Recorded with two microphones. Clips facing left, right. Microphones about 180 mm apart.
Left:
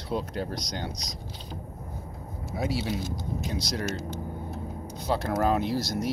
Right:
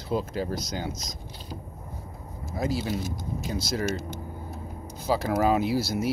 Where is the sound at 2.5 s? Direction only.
Centre (ahead or behind).